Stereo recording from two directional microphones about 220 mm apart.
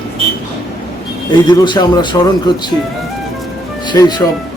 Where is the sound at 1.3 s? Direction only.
20° left (ahead or behind).